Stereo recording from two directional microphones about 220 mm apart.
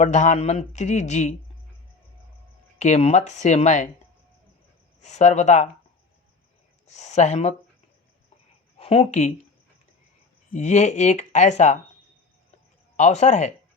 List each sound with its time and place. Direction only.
0.0 s speech: 30° left (ahead or behind)
2.7 s speech: 30° left (ahead or behind)
5.0 s speech: 30° left (ahead or behind)
6.8 s speech: 30° left (ahead or behind)
8.8 s speech: 30° left (ahead or behind)
10.5 s speech: 30° left (ahead or behind)
13.0 s speech: 30° left (ahead or behind)